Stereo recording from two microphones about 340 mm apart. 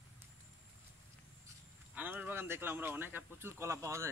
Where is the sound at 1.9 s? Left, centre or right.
Centre.